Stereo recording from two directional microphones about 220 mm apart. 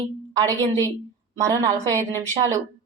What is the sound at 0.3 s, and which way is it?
Speech, 15° right (ahead or behind).